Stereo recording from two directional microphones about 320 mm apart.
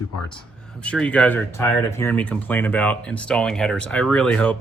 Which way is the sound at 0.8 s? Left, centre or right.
Centre.